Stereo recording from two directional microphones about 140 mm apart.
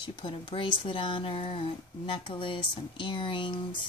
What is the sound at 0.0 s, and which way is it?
Speech, 35° left (ahead or behind).